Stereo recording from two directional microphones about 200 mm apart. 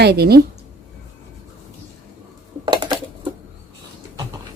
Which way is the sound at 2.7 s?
25° right (ahead or behind).